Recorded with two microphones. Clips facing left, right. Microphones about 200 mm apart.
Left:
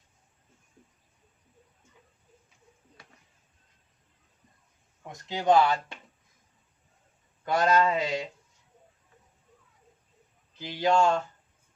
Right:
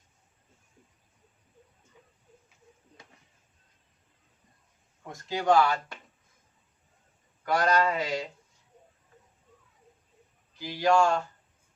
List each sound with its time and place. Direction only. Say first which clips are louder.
5.0 s speech: left 1 dB; 20° left (ahead or behind)
7.4 s speech: left 1 dB; 25° left (ahead or behind)
10.6 s speech: even; 20° left (ahead or behind)